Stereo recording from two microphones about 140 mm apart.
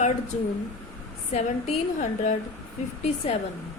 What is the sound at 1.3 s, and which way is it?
A woman's voice, 55° left (ahead or behind).